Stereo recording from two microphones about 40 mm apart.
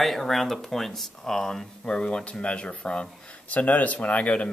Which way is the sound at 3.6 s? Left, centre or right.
Left.